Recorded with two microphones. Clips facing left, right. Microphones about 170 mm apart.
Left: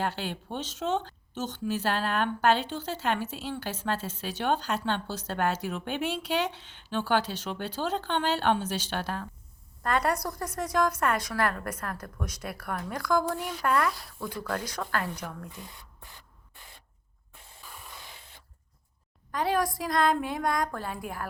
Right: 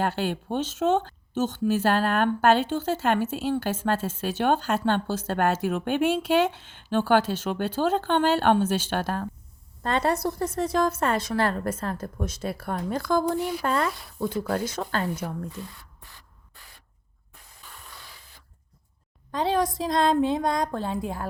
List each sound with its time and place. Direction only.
0.0 s speech: 45° right (ahead or behind)
9.8 s a woman's voice: 25° right (ahead or behind)
15.5 s speech: 20° left (ahead or behind)
17.7 s a sound: 20° left (ahead or behind)
19.3 s a woman's voice: 25° right (ahead or behind)